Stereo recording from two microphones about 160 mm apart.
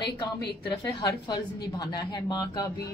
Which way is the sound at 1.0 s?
25° left (ahead or behind).